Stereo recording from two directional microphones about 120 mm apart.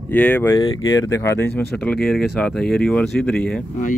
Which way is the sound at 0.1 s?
15° left (ahead or behind).